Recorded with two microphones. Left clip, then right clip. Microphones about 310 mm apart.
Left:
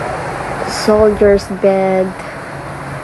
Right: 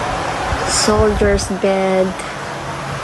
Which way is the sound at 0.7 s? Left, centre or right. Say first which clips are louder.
Left 5 dB; centre.